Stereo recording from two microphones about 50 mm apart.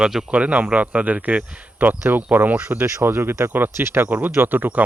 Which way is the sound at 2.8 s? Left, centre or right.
Right.